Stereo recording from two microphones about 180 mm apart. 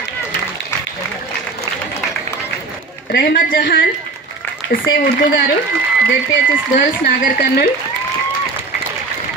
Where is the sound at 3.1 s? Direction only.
55° left (ahead or behind).